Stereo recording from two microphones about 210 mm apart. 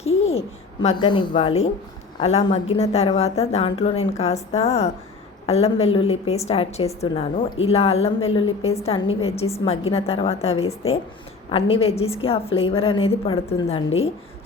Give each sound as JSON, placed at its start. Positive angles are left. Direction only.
{"t": 0.8, "sound": "a woman's voice", "side_deg": 25}